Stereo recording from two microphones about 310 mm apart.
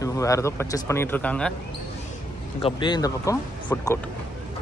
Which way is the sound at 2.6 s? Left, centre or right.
Centre.